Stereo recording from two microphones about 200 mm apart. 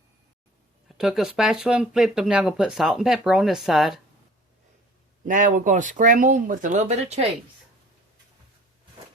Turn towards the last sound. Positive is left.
turn(degrees=-35)  # may be behind; listen again after turning